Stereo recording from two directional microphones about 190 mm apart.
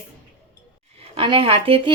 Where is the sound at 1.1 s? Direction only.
30° right (ahead or behind).